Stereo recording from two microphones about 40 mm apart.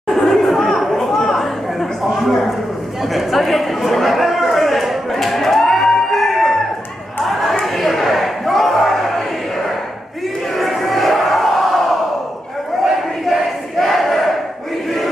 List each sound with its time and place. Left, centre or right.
0.1 s chatter: centre
3.1 s a sound: centre
7.2 s chatter: centre
7.6 s a sound: centre
10.6 s crowd: centre
13.3 s battle cry: centre